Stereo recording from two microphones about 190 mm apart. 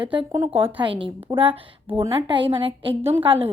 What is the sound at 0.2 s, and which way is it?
A woman's voice, 15° right (ahead or behind).